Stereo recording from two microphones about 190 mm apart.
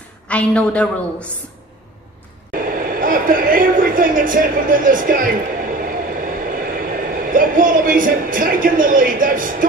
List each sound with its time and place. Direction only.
0.3 s a woman's voice: 5° left (ahead or behind)
2.5 s speech: 50° right (ahead or behind)